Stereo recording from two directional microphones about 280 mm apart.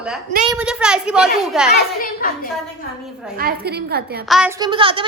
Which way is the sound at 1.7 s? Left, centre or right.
Left.